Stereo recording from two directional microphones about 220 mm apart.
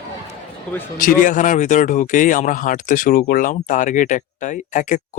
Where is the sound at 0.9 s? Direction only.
40° left (ahead or behind).